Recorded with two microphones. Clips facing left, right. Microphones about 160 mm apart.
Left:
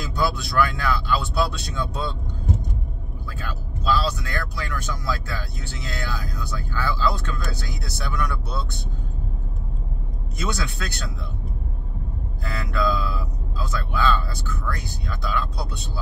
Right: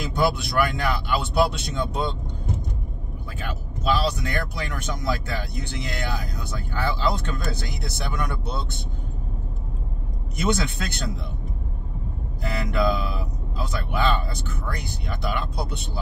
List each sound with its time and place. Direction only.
0.0 s speech: 20° right (ahead or behind)
3.3 s speech: 20° right (ahead or behind)
10.4 s speech: 20° right (ahead or behind)
12.4 s speech: 20° right (ahead or behind)